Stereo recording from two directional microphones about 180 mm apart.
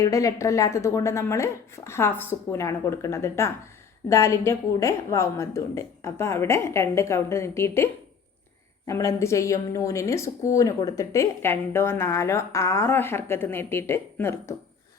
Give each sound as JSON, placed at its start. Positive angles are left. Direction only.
{"t": 0.0, "sound": "a woman's voice", "side_deg": 20}
{"t": 8.9, "sound": "a woman's voice", "side_deg": 15}